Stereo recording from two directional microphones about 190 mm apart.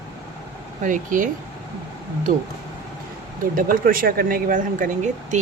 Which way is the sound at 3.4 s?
45° right (ahead or behind).